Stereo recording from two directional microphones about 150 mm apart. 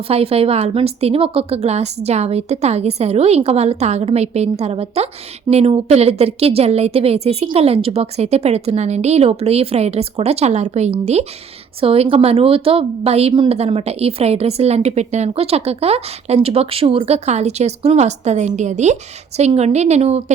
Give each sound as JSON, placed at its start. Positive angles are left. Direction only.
{"t": 0.1, "sound": "a woman's voice", "side_deg": -40}